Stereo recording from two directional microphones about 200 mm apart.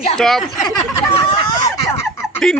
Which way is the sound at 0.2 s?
Centre (ahead or behind).